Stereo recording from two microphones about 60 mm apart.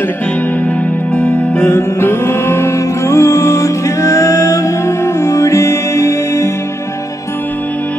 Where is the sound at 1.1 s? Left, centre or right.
Left.